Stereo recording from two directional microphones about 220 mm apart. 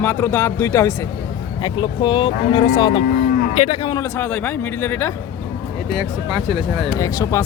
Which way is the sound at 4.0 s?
10° left (ahead or behind).